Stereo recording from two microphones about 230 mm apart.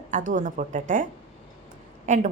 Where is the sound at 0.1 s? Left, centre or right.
Right.